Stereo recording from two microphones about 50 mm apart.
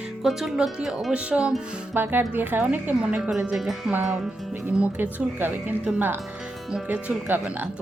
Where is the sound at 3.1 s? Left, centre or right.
Centre.